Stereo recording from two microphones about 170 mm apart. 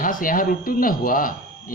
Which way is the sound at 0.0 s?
55° left (ahead or behind).